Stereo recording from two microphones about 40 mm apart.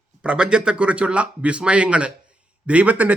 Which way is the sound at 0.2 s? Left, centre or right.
Right.